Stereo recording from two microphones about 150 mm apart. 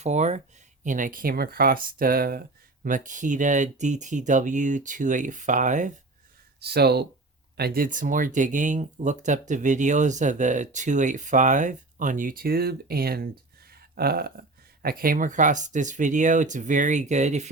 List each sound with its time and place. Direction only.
0.0 s speech: 50° right (ahead or behind)
0.9 s speech: 60° right (ahead or behind); by 2.4 s 85° right
2.8 s speech: 60° right (ahead or behind)
6.6 s speech: 90° right
13.9 s a sound: 90° right
14.8 s speech: 80° right; by 17.5 s 50° right (ahead or behind)